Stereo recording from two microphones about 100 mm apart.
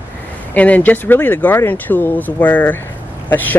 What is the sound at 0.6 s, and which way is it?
Speech, 15° left (ahead or behind).